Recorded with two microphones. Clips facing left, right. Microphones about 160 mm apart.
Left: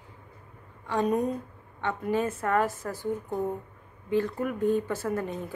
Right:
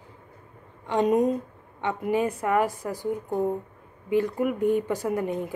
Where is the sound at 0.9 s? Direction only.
20° right (ahead or behind).